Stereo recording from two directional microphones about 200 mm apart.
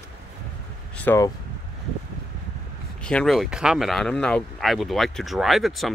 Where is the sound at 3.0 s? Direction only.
5° left (ahead or behind).